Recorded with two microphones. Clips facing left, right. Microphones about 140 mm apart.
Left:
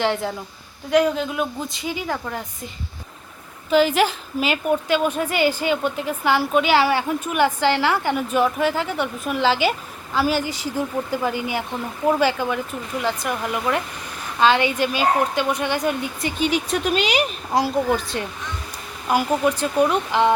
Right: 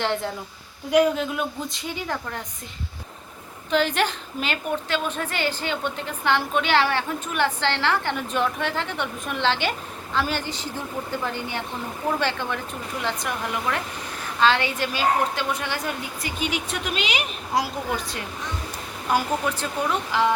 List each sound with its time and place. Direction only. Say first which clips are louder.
0.0 s a woman's voice: left 3 dB; centre (ahead or behind)
3.7 s a woman's voice: left 5 dB; 5° left (ahead or behind)
16.4 s speech: left 7 dB; 35° left (ahead or behind)
19.1 s a woman's voice: left 4 dB; 15° left (ahead or behind)